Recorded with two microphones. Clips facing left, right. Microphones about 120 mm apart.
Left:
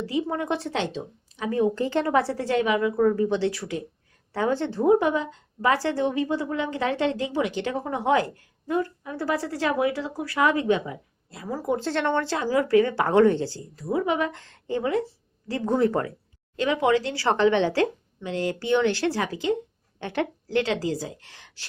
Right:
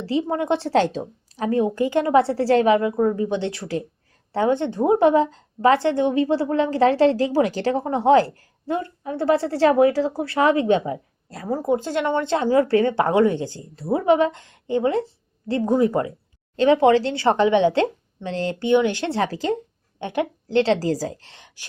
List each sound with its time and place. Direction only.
0.0 s speech: 30° right (ahead or behind)
0.7 s a woman's voice: 40° right (ahead or behind)
1.5 s speech: 15° right (ahead or behind); by 2.9 s 35° right (ahead or behind)
2.9 s speech: 20° right (ahead or behind)
4.9 s a woman's voice: 35° right (ahead or behind)
10.8 s speech: 40° right (ahead or behind)
11.8 s speech: 15° right (ahead or behind)
13.7 s speech: 30° right (ahead or behind)
15.6 s speech: 15° right (ahead or behind)
16.6 s speech: 30° right (ahead or behind)
18.2 s a woman's voice: 30° right (ahead or behind)
18.7 s speech: 15° right (ahead or behind); by 19.5 s 35° right (ahead or behind)
20.0 s speech: 20° right (ahead or behind)